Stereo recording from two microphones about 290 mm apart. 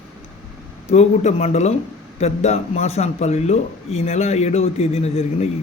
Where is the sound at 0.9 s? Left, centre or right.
Left.